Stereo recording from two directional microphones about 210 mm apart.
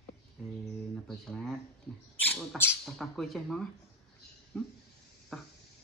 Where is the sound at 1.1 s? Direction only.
5° left (ahead or behind).